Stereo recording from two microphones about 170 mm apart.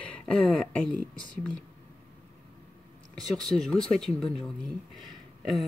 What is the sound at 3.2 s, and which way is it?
Speech, centre (ahead or behind).